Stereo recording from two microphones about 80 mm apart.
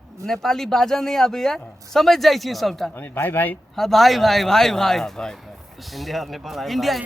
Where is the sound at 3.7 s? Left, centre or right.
Centre.